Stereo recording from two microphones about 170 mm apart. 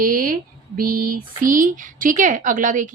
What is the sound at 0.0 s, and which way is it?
Speech, 55° right (ahead or behind).